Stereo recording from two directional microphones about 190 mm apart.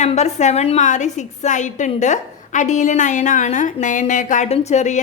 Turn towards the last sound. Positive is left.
turn(degrees=40)  # may be behind; listen again after turning